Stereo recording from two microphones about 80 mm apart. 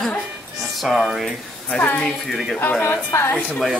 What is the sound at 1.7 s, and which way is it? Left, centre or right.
Speech, centre.